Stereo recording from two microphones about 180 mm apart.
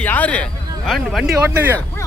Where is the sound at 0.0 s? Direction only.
10° left (ahead or behind).